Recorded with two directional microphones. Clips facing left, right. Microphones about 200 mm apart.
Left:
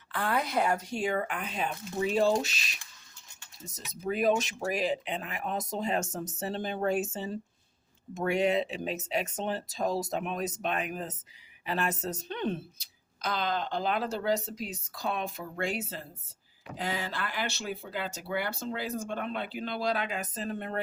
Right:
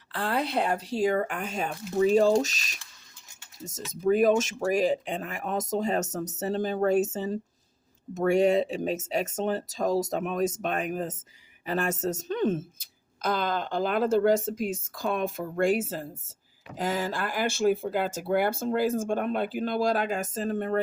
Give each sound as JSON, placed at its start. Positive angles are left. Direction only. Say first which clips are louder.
{"t": 0.1, "sound": "a woman's voice", "louder": "right 2 dB", "side_deg": -30}